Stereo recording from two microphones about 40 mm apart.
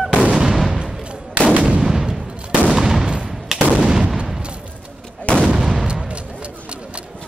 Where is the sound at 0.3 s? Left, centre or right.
Centre.